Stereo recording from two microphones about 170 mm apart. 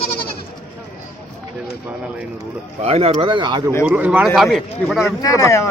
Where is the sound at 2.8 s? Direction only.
35° right (ahead or behind).